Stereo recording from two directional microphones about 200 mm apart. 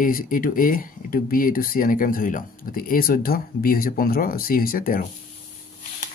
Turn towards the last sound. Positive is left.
turn(degrees=45)  # may be behind; listen again after turning